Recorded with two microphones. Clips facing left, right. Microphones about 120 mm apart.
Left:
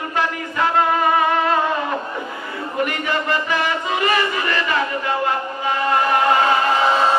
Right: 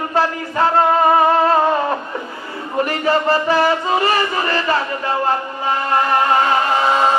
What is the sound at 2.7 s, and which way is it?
Music, 35° right (ahead or behind).